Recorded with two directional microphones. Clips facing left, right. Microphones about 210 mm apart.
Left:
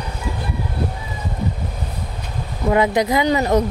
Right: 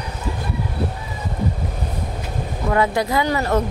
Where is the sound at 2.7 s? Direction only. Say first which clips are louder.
Left 2 dB; 20° left (ahead or behind).